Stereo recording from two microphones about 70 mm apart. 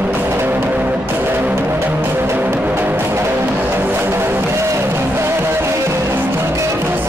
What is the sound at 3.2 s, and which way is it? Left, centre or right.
Music, right.